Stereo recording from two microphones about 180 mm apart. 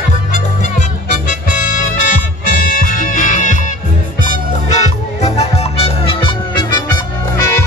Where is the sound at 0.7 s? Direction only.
45° left (ahead or behind).